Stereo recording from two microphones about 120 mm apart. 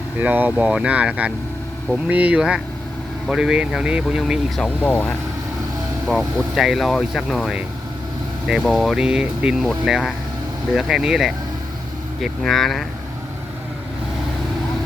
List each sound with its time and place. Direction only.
0.2 s speech: 15° right (ahead or behind); by 4.7 s centre (ahead or behind)
4.8 s speech: 15° left (ahead or behind)
6.1 s speech: centre (ahead or behind)